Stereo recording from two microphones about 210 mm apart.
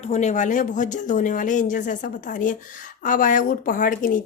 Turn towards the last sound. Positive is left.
turn(degrees=40)  # may be behind; listen again after turning